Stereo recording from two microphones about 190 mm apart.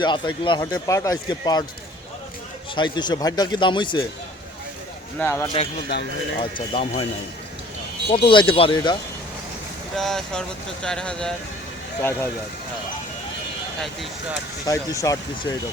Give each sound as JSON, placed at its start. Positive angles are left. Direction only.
{"t": 0.0, "sound": "speech", "side_deg": 25}
{"t": 2.7, "sound": "speech", "side_deg": 25}
{"t": 5.2, "sound": "speech", "side_deg": 15}
{"t": 5.9, "sound": "speech", "side_deg": 65}
{"t": 6.4, "sound": "speech", "side_deg": 30}
{"t": 8.1, "sound": "speech", "side_deg": 25}
{"t": 9.9, "sound": "speech", "side_deg": 0}
{"t": 13.7, "sound": "speech", "side_deg": 0}
{"t": 14.7, "sound": "speech", "side_deg": 20}